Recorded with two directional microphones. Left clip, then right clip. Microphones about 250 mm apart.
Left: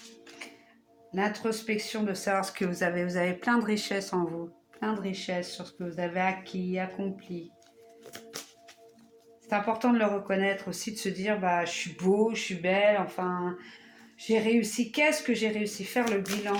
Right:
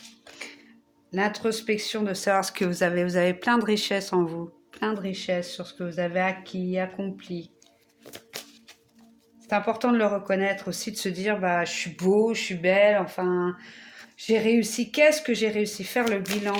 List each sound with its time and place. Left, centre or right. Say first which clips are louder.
0.4 s music: right 5 dB; right
1.1 s speech: right 4 dB; right
9.5 s speech: right 3 dB; right